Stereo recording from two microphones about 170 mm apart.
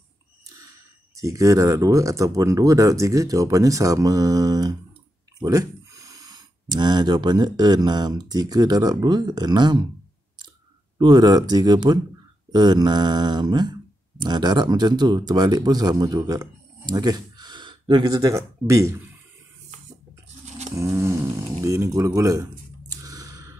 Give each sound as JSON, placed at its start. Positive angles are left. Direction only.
{"t": 1.1, "sound": "speech", "side_deg": -20}
{"t": 11.0, "sound": "speech", "side_deg": -25}
{"t": 20.4, "sound": "toothbrush", "side_deg": -45}
{"t": 20.7, "sound": "dog", "side_deg": -15}
{"t": 21.6, "sound": "a sound", "side_deg": -15}